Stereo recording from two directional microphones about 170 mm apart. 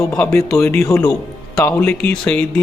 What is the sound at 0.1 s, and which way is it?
Speech, 10° left (ahead or behind).